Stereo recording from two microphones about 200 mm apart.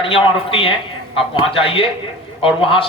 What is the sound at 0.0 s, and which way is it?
Speech, 25° left (ahead or behind).